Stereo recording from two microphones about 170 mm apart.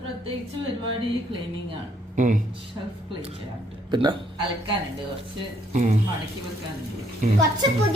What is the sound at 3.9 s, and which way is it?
Speech, 25° right (ahead or behind).